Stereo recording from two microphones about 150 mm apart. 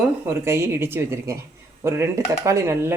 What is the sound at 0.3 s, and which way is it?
Speech, 15° right (ahead or behind).